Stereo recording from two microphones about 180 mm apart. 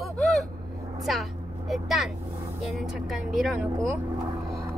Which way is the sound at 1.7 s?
Centre (ahead or behind).